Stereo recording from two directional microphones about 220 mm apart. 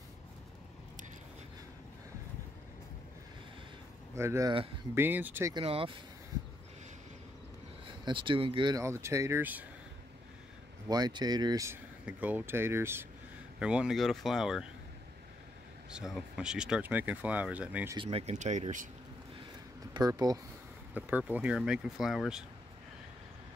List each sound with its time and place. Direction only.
4.1 s speech: 10° right (ahead or behind)
5.5 s speech: 25° right (ahead or behind)
7.8 s speech: 20° right (ahead or behind)
10.9 s speech: 20° right (ahead or behind); by 14.7 s centre (ahead or behind)
15.9 s speech: 5° right (ahead or behind)
17.9 s speech: 25° right (ahead or behind)
19.9 s speech: 15° right (ahead or behind); by 22.4 s centre (ahead or behind)